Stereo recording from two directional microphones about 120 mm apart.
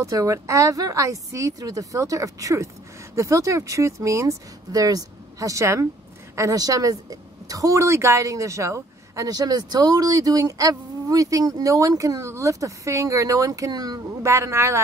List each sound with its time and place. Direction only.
0.0 s a woman's voice: 25° right (ahead or behind)